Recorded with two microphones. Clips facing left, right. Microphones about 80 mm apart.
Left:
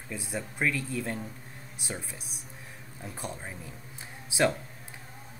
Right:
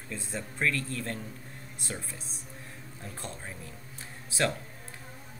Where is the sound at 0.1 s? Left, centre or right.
Centre.